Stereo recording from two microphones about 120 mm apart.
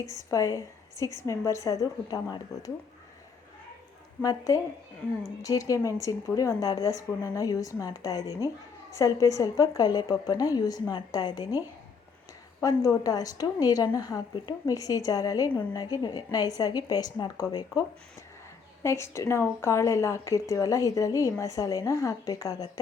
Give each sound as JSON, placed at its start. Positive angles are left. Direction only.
{"t": 0.3, "sound": "speech", "side_deg": 25}
{"t": 4.2, "sound": "a woman's voice", "side_deg": 30}
{"t": 12.6, "sound": "a woman's voice", "side_deg": 30}
{"t": 18.8, "sound": "speech", "side_deg": 20}